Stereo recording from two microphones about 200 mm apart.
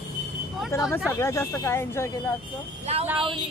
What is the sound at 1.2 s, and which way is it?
Speech, 15° left (ahead or behind).